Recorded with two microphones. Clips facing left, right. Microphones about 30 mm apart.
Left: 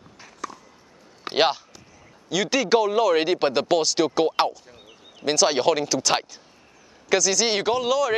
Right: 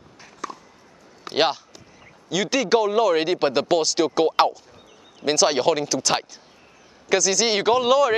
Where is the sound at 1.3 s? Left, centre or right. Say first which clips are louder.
Even; left.